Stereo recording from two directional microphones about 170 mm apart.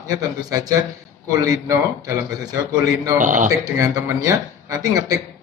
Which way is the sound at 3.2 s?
50° right (ahead or behind).